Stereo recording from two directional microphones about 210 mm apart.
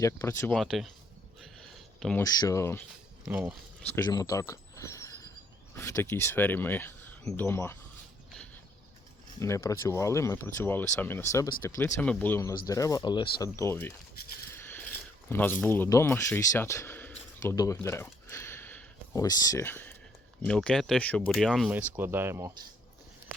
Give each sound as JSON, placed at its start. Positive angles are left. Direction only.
{"t": 0.0, "sound": "speech", "side_deg": 15}
{"t": 0.5, "sound": "speech", "side_deg": 0}
{"t": 1.4, "sound": "a sound", "side_deg": 0}
{"t": 2.2, "sound": "speech", "side_deg": 15}
{"t": 3.2, "sound": "speech", "side_deg": -10}
{"t": 3.9, "sound": "a sound", "side_deg": 15}
{"t": 5.7, "sound": "speech", "side_deg": 15}
{"t": 9.4, "sound": "speech", "side_deg": 15}
{"t": 14.5, "sound": "mechanisms", "side_deg": 10}
{"t": 15.6, "sound": "speech", "side_deg": 10}